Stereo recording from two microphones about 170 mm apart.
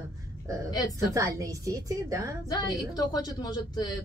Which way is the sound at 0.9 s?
20° right (ahead or behind).